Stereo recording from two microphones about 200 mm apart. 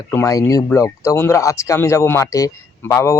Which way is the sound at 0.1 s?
15° left (ahead or behind).